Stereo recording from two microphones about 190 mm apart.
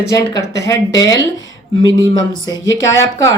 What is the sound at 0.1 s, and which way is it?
Speech, 15° left (ahead or behind).